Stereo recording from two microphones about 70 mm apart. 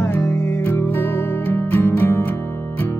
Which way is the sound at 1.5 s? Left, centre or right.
Left.